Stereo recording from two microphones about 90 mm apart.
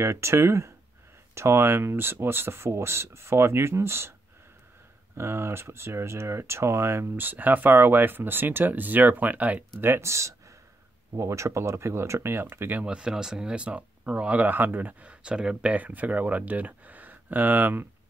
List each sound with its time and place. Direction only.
0.0 s speech: 30° right (ahead or behind)
5.1 s speech: 30° right (ahead or behind)
9.8 s speech: 25° right (ahead or behind)
12.8 s speech: 10° right (ahead or behind)